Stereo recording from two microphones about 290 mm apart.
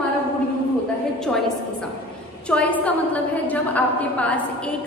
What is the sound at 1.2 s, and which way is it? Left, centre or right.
A woman's voice, centre.